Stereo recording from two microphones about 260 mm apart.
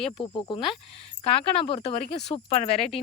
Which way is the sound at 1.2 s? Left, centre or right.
Left.